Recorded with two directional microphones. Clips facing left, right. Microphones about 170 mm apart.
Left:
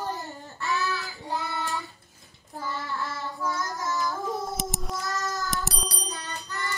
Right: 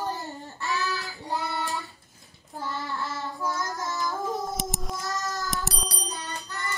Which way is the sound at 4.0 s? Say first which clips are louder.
Even; centre (ahead or behind).